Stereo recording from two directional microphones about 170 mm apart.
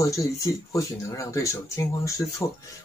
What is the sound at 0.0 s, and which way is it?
Speech, 20° left (ahead or behind).